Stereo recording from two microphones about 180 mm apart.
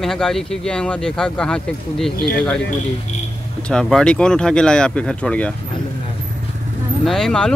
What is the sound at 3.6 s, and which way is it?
Speech, 5° left (ahead or behind).